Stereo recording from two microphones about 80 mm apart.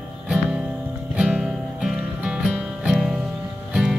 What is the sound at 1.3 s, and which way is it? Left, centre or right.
Music, centre.